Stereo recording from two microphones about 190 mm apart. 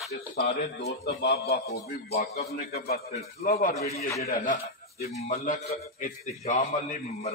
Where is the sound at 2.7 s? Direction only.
55° left (ahead or behind).